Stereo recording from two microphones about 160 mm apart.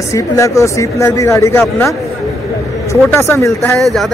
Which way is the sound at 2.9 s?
15° left (ahead or behind).